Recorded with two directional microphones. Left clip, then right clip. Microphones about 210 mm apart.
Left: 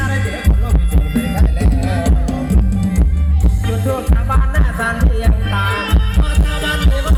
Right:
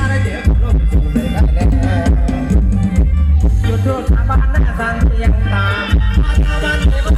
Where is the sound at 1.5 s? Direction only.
40° left (ahead or behind).